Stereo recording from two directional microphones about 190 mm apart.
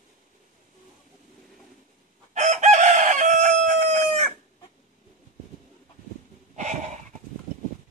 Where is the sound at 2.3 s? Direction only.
40° right (ahead or behind).